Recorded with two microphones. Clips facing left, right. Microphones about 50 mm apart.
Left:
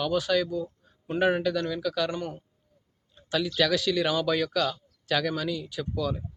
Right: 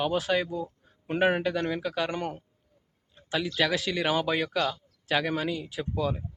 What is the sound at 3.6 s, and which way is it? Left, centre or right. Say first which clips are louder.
Speech: left 3 dB; right.